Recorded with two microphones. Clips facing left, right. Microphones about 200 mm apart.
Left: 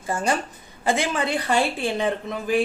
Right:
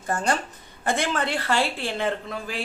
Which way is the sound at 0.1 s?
10° left (ahead or behind).